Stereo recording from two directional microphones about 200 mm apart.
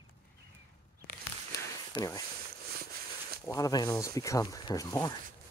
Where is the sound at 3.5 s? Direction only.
15° left (ahead or behind).